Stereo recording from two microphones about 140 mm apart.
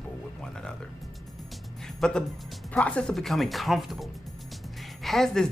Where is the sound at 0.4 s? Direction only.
5° left (ahead or behind).